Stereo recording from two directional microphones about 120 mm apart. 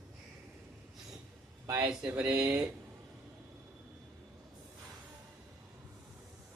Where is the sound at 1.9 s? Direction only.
10° right (ahead or behind).